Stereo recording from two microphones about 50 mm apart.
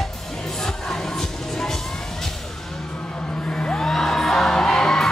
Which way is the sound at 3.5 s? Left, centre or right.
Centre.